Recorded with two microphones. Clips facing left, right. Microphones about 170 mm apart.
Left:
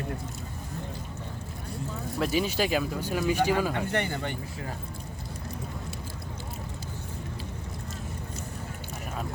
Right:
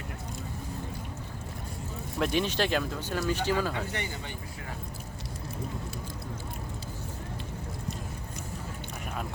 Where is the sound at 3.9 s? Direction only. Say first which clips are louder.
Left 7 dB; 60° left (ahead or behind).